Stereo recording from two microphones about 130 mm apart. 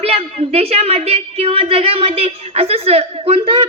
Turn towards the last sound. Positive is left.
turn(degrees=-50)  # may be behind; listen again after turning